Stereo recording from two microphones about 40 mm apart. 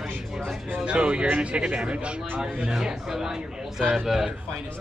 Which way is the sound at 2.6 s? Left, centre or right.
Centre.